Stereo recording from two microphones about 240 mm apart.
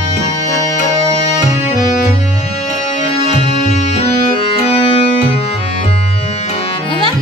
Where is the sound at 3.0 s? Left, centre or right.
Left.